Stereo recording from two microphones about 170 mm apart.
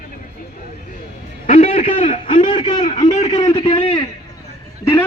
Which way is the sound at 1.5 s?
35° left (ahead or behind).